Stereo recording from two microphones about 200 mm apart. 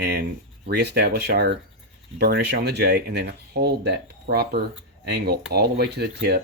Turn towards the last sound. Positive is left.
turn(degrees=-55)  # may be behind; listen again after turning